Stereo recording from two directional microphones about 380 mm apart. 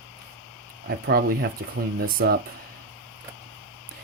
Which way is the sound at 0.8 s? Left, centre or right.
Right.